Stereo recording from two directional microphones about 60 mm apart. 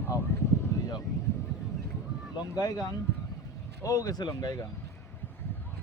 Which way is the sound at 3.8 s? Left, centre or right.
Left.